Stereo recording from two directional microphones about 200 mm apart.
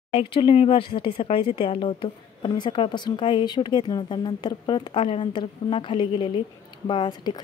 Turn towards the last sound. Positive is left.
turn(degrees=20)  # may be behind; listen again after turning